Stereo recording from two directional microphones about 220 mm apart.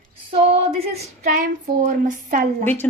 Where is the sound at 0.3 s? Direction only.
25° right (ahead or behind).